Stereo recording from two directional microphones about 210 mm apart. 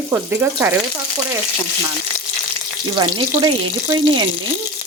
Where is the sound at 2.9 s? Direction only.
20° right (ahead or behind).